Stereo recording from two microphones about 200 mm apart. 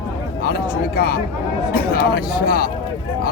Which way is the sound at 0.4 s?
50° left (ahead or behind).